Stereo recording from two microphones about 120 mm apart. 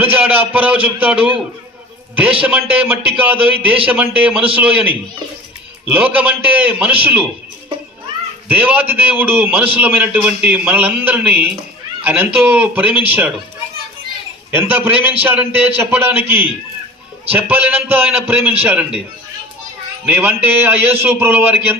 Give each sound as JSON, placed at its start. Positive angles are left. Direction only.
{"t": 0.0, "sound": "a man's voice", "side_deg": -15}
{"t": 8.4, "sound": "a man's voice", "side_deg": -15}
{"t": 14.5, "sound": "a man's voice", "side_deg": -15}
{"t": 20.1, "sound": "a man's voice", "side_deg": -15}